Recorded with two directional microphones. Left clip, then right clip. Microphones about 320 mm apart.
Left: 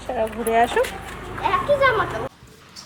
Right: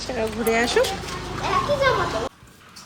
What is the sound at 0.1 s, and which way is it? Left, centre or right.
Speech, centre.